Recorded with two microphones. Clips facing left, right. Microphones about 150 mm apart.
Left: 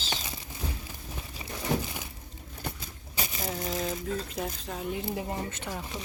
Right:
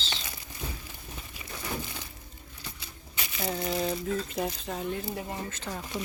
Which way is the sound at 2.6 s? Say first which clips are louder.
Left 7 dB; 45° left (ahead or behind).